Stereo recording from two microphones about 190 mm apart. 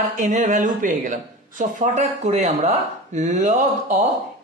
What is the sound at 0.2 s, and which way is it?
Speech, 40° right (ahead or behind).